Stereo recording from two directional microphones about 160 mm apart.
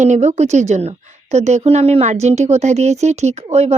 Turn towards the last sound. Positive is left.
turn(degrees=-40)  # may be behind; listen again after turning